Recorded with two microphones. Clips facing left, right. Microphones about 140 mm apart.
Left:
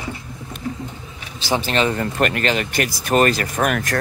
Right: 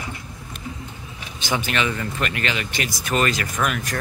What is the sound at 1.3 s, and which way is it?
Speech, 35° left (ahead or behind).